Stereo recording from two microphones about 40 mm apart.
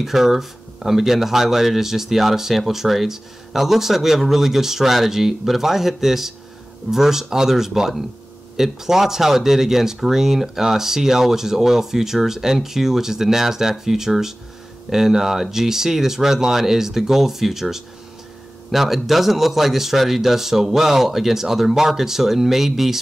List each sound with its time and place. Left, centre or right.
0.0 s speech: centre